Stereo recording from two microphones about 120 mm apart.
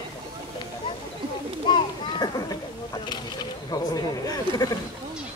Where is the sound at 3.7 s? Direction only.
30° left (ahead or behind).